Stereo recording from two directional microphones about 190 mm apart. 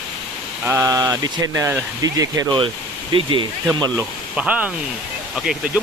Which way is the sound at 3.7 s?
15° right (ahead or behind).